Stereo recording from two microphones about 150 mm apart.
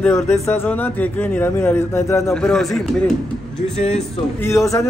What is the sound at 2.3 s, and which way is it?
Speech, 5° left (ahead or behind).